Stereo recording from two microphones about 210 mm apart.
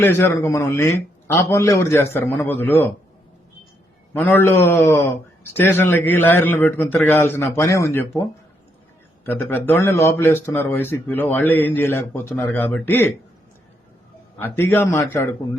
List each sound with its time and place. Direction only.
0.0 s a man's voice: 10° left (ahead or behind)
4.1 s a man's voice: 10° left (ahead or behind)
9.2 s a man's voice: 10° left (ahead or behind)
14.3 s a man's voice: 10° left (ahead or behind)